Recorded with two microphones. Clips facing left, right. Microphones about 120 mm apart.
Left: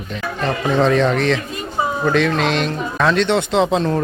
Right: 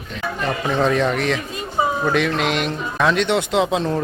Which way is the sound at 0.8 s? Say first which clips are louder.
Left 3 dB; 10° right (ahead or behind).